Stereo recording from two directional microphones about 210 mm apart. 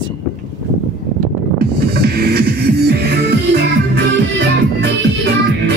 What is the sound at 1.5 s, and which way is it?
Music, 50° right (ahead or behind).